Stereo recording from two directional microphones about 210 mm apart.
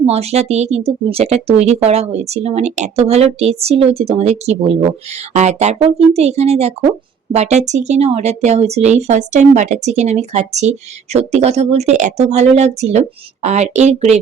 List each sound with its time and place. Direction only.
0.0 s speech: 30° right (ahead or behind)